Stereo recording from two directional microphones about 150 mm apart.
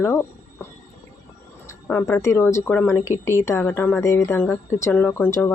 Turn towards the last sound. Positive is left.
turn(degrees=10)  # may be behind; listen again after turning